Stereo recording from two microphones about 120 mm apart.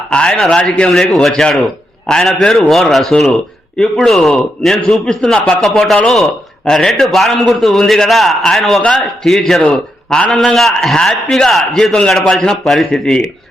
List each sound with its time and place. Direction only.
0.1 s a man's voice: 5° left (ahead or behind)